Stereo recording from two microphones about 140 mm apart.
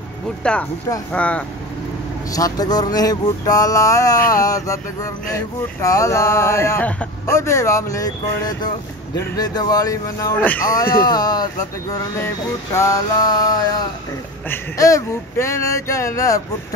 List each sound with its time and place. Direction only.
0.4 s speech: 10° left (ahead or behind)
2.3 s speech: 25° left (ahead or behind); by 7.1 s 10° left (ahead or behind)
7.2 s speech: 20° left (ahead or behind)
11.1 s speech: 30° left (ahead or behind)
12.7 s speech: 25° left (ahead or behind)